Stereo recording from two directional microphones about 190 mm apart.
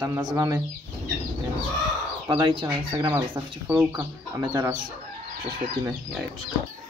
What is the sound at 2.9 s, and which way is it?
Speech, 20° right (ahead or behind).